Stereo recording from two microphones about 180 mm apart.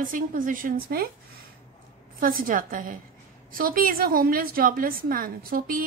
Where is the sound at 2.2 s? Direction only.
50° right (ahead or behind).